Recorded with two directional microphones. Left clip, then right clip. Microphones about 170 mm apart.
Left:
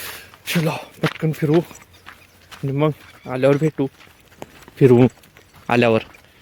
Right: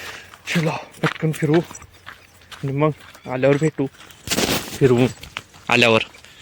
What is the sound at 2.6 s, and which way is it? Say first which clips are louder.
Speech: even; 20° left (ahead or behind).